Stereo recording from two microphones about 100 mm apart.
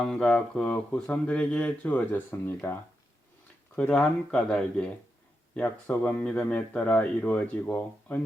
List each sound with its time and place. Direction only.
0.0 s speech: 5° left (ahead or behind)
3.8 s speech: 10° left (ahead or behind)